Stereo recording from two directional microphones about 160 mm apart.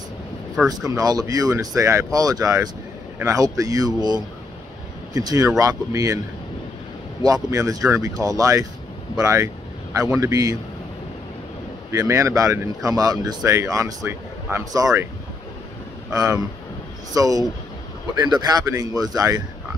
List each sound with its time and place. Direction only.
0.7 s speech: 25° right (ahead or behind)
7.2 s speech: 25° right (ahead or behind)
11.9 s speech: 20° right (ahead or behind)
16.1 s speech: 20° right (ahead or behind)